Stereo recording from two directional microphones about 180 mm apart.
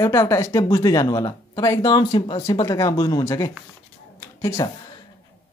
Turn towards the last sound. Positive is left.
turn(degrees=20)  # may be behind; listen again after turning